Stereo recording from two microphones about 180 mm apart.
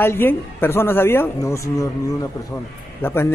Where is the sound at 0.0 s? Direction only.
10° left (ahead or behind).